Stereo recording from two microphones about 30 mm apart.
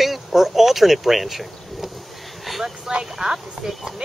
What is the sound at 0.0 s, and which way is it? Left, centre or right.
Speech, centre.